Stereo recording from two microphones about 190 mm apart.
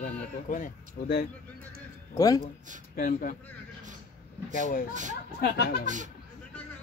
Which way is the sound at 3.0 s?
45° left (ahead or behind).